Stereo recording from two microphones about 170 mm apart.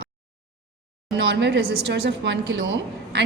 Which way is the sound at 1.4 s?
90° right.